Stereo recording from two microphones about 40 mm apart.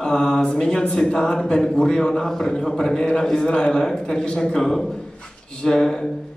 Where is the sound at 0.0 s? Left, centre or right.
Centre.